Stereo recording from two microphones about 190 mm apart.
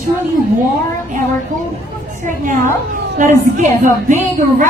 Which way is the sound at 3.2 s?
40° right (ahead or behind).